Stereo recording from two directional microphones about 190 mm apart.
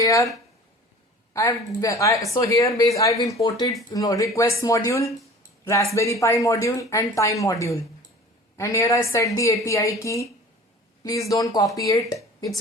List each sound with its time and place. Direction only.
0.0 s speech: 15° left (ahead or behind)
1.3 s speech: 15° left (ahead or behind)